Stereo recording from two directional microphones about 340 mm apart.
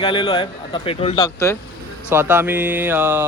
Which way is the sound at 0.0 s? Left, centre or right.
Centre.